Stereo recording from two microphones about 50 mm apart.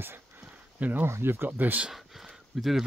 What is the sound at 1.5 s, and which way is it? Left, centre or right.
Speech, right.